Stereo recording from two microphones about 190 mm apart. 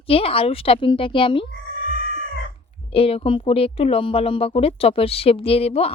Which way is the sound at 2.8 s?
30° left (ahead or behind).